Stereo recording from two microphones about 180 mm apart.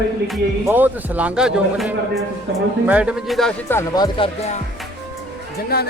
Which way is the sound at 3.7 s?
25° left (ahead or behind).